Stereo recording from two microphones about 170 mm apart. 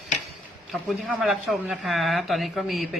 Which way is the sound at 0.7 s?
Centre (ahead or behind).